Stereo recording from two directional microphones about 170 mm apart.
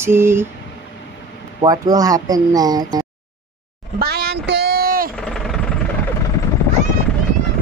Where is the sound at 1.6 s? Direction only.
20° right (ahead or behind).